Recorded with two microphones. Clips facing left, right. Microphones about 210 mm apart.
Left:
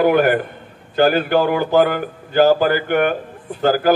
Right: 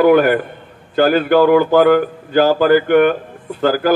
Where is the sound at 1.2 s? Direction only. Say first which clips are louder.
Right 6 dB; 50° right (ahead or behind).